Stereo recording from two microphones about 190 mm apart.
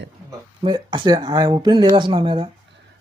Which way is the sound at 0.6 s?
25° right (ahead or behind).